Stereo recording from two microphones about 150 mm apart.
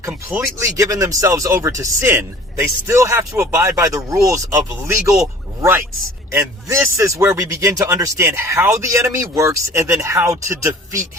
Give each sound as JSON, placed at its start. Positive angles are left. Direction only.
{"t": 0.0, "sound": "speech", "side_deg": -15}